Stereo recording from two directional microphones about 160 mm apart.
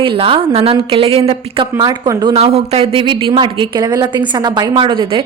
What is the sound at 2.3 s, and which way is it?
A woman's voice, 40° right (ahead or behind).